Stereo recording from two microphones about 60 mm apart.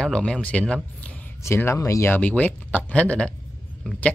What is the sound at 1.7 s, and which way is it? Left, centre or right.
Speech, left.